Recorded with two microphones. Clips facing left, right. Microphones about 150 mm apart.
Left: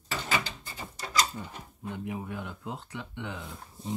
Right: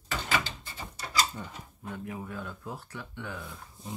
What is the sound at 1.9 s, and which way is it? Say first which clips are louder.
Speech: left 2 dB; 20° left (ahead or behind).